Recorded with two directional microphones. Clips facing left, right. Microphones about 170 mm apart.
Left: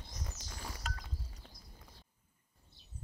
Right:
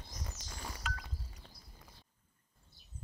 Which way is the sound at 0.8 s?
40° left (ahead or behind).